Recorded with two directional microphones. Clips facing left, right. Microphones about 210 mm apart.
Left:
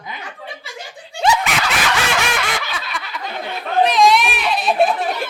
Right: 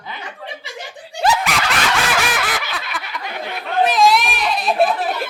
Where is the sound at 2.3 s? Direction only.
Centre (ahead or behind).